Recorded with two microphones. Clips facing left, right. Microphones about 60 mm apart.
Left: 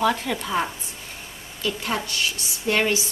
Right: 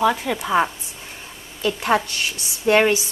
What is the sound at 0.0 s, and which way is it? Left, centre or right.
Speech, centre.